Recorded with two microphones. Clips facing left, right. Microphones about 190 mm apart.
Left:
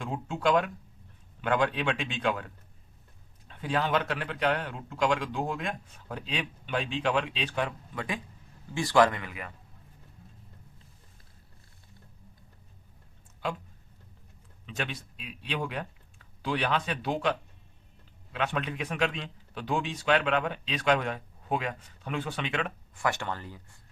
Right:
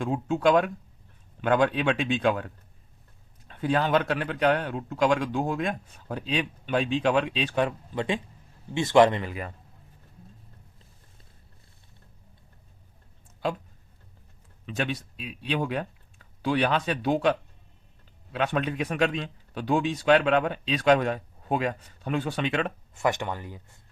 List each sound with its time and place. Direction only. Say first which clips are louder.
0.0 s a man's voice: right 6 dB; 45° right (ahead or behind)
3.6 s a man's voice: right 4 dB; 45° right (ahead or behind)
7.9 s speech: right 7 dB; 25° right (ahead or behind)
14.8 s a man's voice: right 6 dB; 40° right (ahead or behind)
18.3 s a man's voice: right 5 dB; 40° right (ahead or behind)
23.0 s speech: right 4 dB; 20° right (ahead or behind)